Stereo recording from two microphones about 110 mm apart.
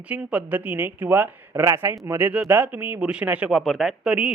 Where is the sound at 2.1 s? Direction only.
15° right (ahead or behind).